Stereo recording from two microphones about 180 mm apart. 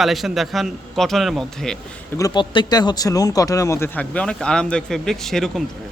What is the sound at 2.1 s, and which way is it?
Speech, 20° left (ahead or behind).